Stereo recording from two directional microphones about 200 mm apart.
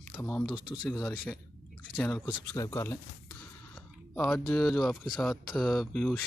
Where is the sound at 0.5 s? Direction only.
20° left (ahead or behind).